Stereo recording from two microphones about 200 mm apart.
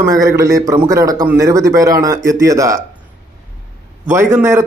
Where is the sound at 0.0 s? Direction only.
15° right (ahead or behind).